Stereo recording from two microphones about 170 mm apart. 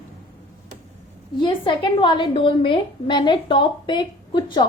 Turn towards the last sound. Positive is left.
turn(degrees=25)  # may be behind; listen again after turning